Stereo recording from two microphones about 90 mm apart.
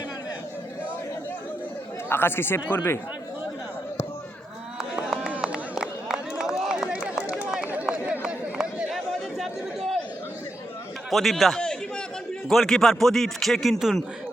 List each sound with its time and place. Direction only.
2.0 s speech: 25° left (ahead or behind)
5.0 s run: 5° right (ahead or behind)
11.1 s a sound: centre (ahead or behind)
12.5 s a man's voice: 5° left (ahead or behind)